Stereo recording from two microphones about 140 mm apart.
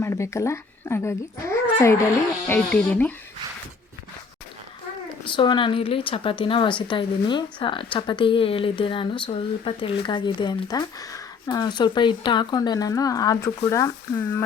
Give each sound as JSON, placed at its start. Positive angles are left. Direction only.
{"t": 0.0, "sound": "speech", "side_deg": 20}
{"t": 5.3, "sound": "a woman's voice", "side_deg": 35}